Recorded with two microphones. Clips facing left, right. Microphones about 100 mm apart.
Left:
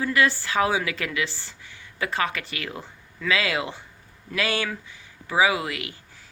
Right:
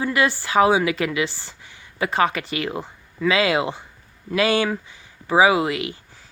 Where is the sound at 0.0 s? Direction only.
20° right (ahead or behind).